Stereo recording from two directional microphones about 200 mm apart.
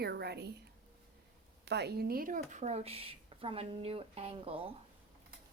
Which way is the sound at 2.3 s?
35° right (ahead or behind).